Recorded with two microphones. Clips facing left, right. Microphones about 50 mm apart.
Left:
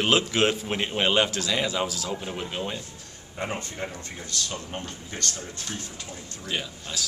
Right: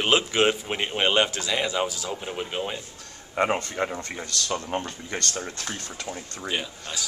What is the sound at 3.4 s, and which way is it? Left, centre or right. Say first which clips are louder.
Speech: right 8 dB; right.